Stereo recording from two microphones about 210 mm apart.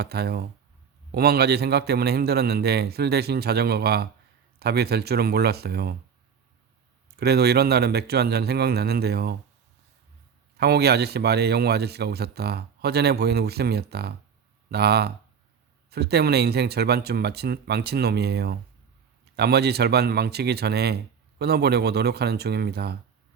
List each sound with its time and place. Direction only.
0.0 s a man's voice: 50° right (ahead or behind)
7.2 s a man's voice: 50° right (ahead or behind)
10.6 s a man's voice: 50° right (ahead or behind)